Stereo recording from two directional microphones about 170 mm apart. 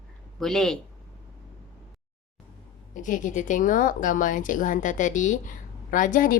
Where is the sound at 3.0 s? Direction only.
50° left (ahead or behind).